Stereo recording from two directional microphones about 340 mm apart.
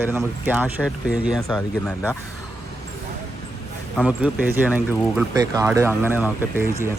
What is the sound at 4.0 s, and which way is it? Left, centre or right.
A man's voice, centre.